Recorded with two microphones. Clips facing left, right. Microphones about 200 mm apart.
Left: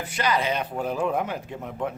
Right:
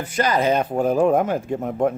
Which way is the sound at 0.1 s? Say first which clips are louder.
Right 6 dB; 45° right (ahead or behind).